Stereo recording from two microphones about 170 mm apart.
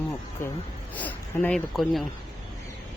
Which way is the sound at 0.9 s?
10° left (ahead or behind).